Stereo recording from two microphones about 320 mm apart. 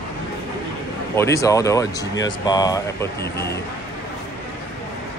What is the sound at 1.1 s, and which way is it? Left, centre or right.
Speech, centre.